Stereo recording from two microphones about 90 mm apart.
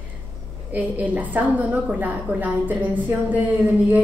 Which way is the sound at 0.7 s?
15° right (ahead or behind).